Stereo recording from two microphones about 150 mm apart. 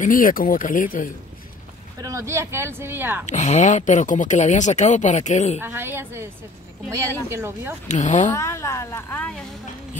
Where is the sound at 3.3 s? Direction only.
50° left (ahead or behind).